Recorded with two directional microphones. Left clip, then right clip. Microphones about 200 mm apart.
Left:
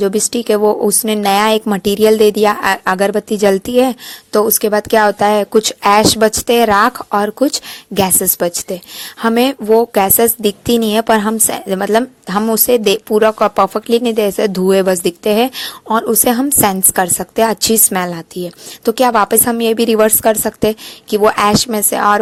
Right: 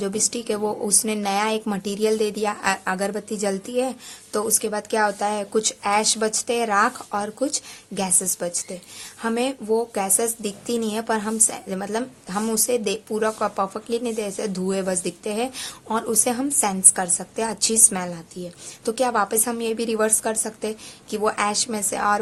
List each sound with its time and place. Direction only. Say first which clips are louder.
0.0 s a woman's voice: left 11 dB; 35° left (ahead or behind)